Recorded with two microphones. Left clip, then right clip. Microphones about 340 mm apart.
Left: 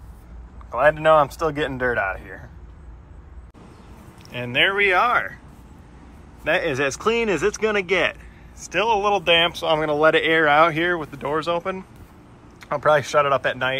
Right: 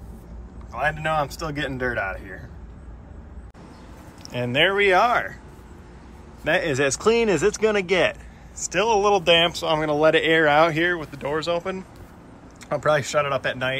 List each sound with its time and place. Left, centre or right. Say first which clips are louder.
0.7 s speech: left 8 dB; centre
4.3 s speech: even; centre
6.4 s speech: even; centre